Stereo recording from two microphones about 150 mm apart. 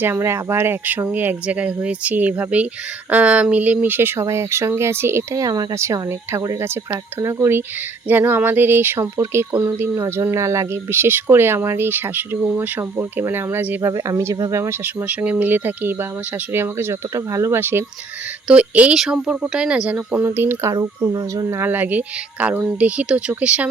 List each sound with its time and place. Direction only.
0.0 s speech: 15° right (ahead or behind)